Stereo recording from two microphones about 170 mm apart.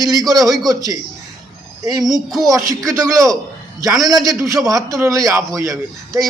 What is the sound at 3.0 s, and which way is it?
A man's voice, 20° right (ahead or behind).